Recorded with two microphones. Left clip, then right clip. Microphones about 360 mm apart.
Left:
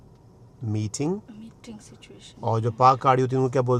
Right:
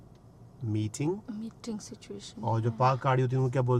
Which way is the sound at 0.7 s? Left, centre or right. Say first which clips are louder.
Left 4 dB; left.